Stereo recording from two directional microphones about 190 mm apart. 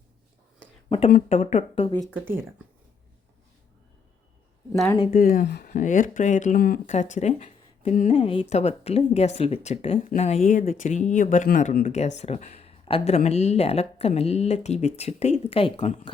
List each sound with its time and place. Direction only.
0.9 s speech: 30° left (ahead or behind)
2.2 s speech: 10° right (ahead or behind)
4.7 s speech: centre (ahead or behind)
5.1 s speech: 45° left (ahead or behind); by 16.1 s 30° left (ahead or behind)